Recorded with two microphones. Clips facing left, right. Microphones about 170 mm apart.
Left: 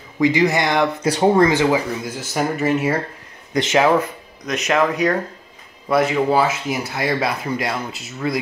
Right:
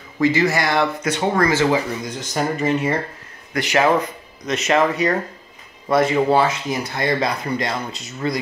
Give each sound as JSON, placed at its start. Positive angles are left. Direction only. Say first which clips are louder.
{"t": 0.2, "sound": "speech", "louder": "left 1 dB", "side_deg": 15}
{"t": 1.0, "sound": "speech", "louder": "left 5 dB", "side_deg": 35}
{"t": 1.3, "sound": "speech", "louder": "even", "side_deg": 20}
{"t": 3.5, "sound": "speech", "louder": "left 4 dB", "side_deg": 20}
{"t": 4.5, "sound": "speech", "louder": "right 1 dB", "side_deg": 0}